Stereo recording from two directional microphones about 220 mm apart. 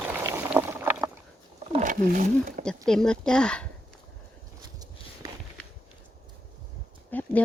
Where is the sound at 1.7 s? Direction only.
35° right (ahead or behind).